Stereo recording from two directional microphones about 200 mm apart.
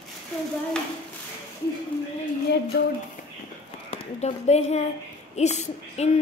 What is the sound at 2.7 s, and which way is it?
Speech, 55° left (ahead or behind).